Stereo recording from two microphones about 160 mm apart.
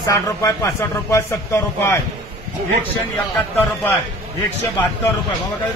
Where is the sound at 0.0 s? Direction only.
20° left (ahead or behind).